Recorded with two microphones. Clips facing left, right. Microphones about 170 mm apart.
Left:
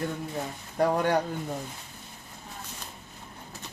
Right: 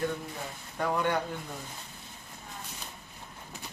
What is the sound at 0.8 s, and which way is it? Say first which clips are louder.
Speech: left 5 dB; 40° left (ahead or behind).